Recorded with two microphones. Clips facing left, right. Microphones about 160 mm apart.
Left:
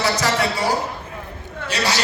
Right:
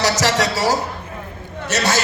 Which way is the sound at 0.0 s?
90° right.